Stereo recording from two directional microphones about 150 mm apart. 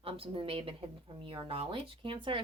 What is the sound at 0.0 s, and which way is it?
A woman's voice, 40° right (ahead or behind).